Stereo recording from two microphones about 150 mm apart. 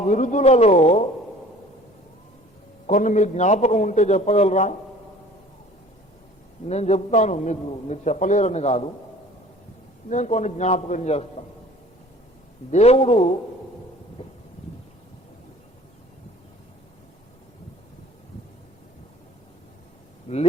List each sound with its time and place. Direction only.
0.0 s a man's voice: 55° left (ahead or behind)
2.8 s a man's voice: 55° left (ahead or behind)
6.7 s a man's voice: 45° left (ahead or behind)
10.1 s a man's voice: 50° left (ahead or behind)
12.7 s a man's voice: 45° left (ahead or behind)
14.2 s a sound: 40° left (ahead or behind)
20.2 s speech: 45° left (ahead or behind)